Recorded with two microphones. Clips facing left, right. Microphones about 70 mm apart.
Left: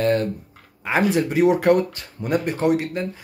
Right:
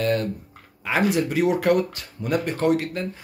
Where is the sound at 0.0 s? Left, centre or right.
Left.